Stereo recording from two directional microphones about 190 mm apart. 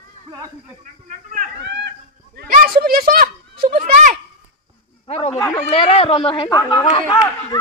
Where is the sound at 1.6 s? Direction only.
60° right (ahead or behind).